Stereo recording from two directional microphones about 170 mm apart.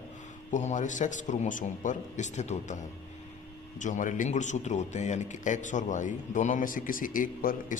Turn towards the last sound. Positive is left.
turn(degrees=55)  # may be behind; listen again after turning